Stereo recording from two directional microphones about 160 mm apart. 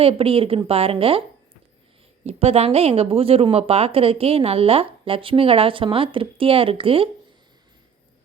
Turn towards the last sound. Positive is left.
turn(degrees=-35)  # may be behind; listen again after turning